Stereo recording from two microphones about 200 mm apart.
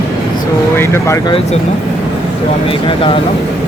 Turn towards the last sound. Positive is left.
turn(degrees=30)  # may be behind; listen again after turning